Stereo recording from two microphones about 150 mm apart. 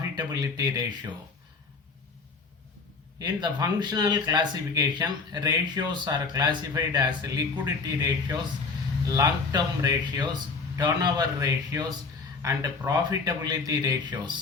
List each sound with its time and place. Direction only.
0.2 s speech: 25° right (ahead or behind)
3.2 s speech: 25° right (ahead or behind)